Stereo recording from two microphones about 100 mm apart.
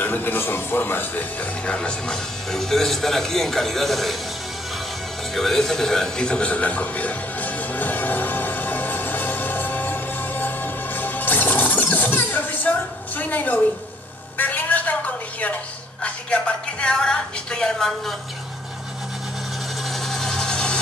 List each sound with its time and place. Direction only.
0.0 s speech: 20° left (ahead or behind)
1.7 s speech: 10° left (ahead or behind)
5.3 s music: centre (ahead or behind)
13.2 s speech: 15° left (ahead or behind)
14.4 s a sound: 15° left (ahead or behind)
16.0 s speech: 10° left (ahead or behind)
20.1 s a sound: 5° left (ahead or behind)